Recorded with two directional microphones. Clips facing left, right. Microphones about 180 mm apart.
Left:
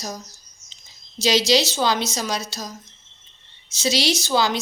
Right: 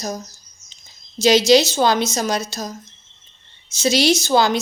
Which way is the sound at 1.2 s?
50° right (ahead or behind).